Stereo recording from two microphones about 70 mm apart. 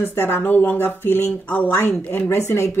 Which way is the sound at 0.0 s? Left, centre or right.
Left.